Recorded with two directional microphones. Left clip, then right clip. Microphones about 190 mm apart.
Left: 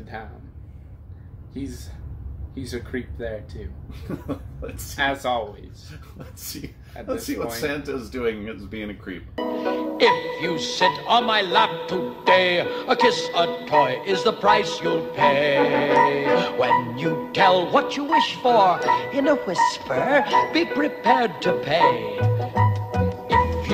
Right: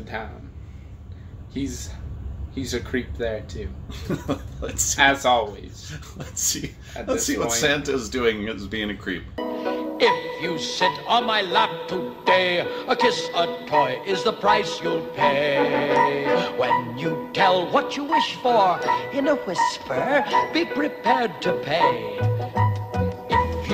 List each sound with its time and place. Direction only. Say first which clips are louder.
0.1 s speech: right 4 dB; 5° left (ahead or behind)
2.5 s speech: right 4 dB; 10° left (ahead or behind)
4.1 s speech: right 4 dB; 20° right (ahead or behind)
4.9 s speech: right 5 dB; 10° left (ahead or behind)
7.6 s speech: right 5 dB; 20° right (ahead or behind)
9.3 s speech: left 4 dB; centre (ahead or behind)